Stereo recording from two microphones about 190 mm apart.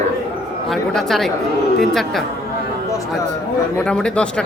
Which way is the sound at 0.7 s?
Centre (ahead or behind).